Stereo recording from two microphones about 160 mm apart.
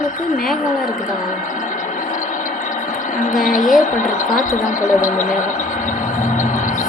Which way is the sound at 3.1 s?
50° left (ahead or behind).